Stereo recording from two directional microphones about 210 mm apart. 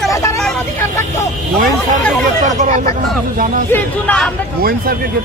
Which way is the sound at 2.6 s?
35° right (ahead or behind).